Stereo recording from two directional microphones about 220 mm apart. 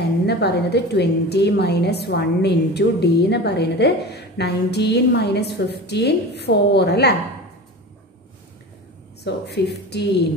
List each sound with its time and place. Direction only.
0.3 s a woman's voice: 50° left (ahead or behind)
9.2 s a woman's voice: 50° left (ahead or behind)